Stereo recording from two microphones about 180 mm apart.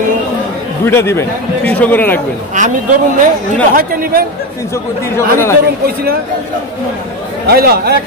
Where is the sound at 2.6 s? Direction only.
45° right (ahead or behind).